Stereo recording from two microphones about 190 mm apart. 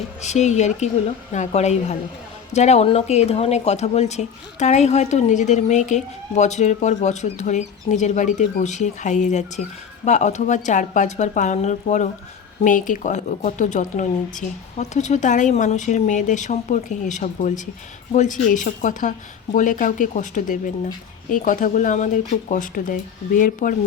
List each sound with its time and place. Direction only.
0.2 s speech: 35° left (ahead or behind)